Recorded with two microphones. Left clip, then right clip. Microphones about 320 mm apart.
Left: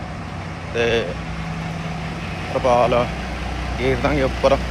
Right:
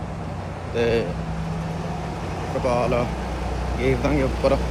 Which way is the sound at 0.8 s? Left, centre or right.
Centre.